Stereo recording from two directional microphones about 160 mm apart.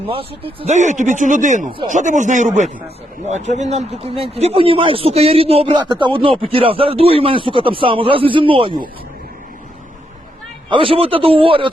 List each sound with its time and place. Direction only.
0.1 s speech: 35° right (ahead or behind)
0.8 s speech: 50° right (ahead or behind); by 8.9 s 30° right (ahead or behind)
10.7 s speech: 35° right (ahead or behind)